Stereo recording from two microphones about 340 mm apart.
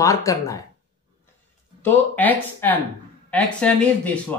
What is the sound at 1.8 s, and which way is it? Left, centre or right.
Speech, centre.